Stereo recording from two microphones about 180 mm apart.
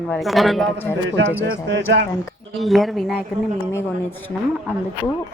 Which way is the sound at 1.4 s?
70° right (ahead or behind).